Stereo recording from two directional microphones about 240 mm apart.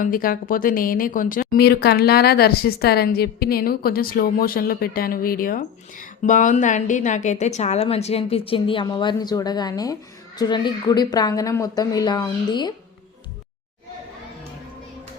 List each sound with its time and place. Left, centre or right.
0.0 s speech: left; by 12.7 s centre